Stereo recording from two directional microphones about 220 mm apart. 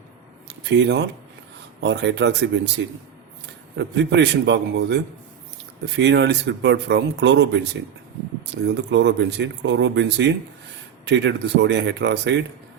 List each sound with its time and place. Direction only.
0.4 s a sound: 55° right (ahead or behind)
1.8 s speech: 50° right (ahead or behind)
3.8 s speech: 55° right (ahead or behind)